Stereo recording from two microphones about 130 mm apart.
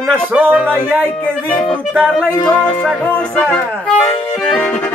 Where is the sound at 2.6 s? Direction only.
10° left (ahead or behind).